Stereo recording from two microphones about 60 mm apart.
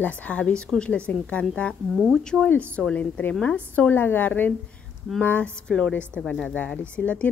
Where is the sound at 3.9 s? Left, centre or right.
Left.